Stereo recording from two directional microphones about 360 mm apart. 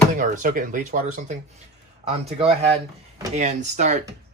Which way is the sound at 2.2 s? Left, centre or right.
Centre.